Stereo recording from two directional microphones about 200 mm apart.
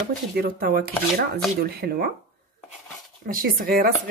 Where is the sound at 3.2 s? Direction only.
45° right (ahead or behind).